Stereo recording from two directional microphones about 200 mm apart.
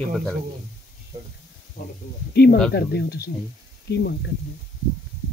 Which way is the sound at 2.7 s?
55° left (ahead or behind).